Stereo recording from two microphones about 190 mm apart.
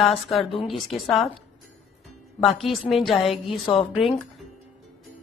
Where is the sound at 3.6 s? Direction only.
30° left (ahead or behind).